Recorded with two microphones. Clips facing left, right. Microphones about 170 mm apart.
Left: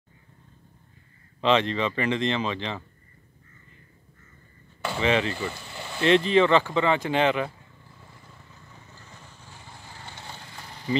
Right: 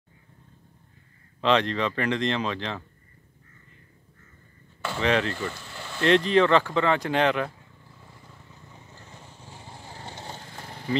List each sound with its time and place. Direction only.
1.4 s speech: centre (ahead or behind)
4.8 s chop: 5° left (ahead or behind)
6.0 s speech: centre (ahead or behind)
8.7 s vehicle: 25° right (ahead or behind); by 10.9 s 50° right (ahead or behind)